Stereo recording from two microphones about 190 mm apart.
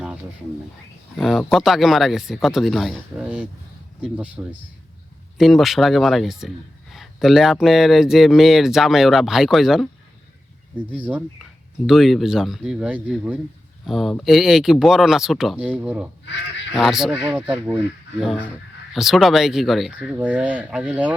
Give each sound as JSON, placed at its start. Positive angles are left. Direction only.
{"t": 1.2, "sound": "speech", "side_deg": 0}
{"t": 5.4, "sound": "speech", "side_deg": 0}
{"t": 10.9, "sound": "speech", "side_deg": -5}
{"t": 16.2, "sound": "goose", "side_deg": 70}
{"t": 16.7, "sound": "speech", "side_deg": 0}
{"t": 18.9, "sound": "speech", "side_deg": 0}